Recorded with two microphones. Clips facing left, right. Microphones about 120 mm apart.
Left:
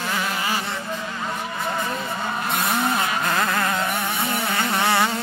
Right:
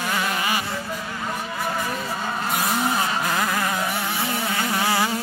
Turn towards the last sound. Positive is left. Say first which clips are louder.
# left 2 dB
turn(degrees=65)  # may be behind; listen again after turning